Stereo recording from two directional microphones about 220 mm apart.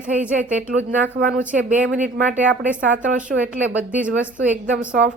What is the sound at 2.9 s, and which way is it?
Speech, 35° right (ahead or behind).